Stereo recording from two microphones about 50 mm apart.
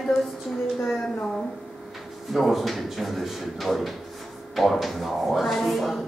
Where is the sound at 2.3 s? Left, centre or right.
Centre.